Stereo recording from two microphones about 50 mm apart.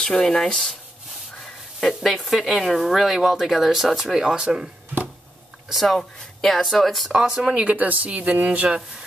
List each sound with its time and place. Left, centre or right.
0.0 s speech: centre
2.0 s speech: centre
5.7 s speech: centre
7.1 s speech: centre
7.6 s speech: right